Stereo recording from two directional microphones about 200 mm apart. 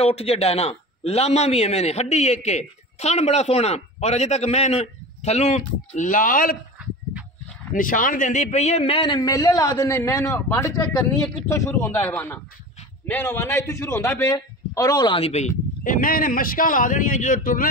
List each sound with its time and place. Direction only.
0.0 s a man's voice: 30° left (ahead or behind)
7.7 s a man's voice: 40° left (ahead or behind)